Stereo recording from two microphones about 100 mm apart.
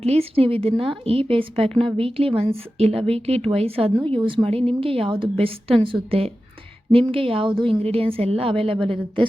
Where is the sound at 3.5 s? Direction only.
75° right (ahead or behind).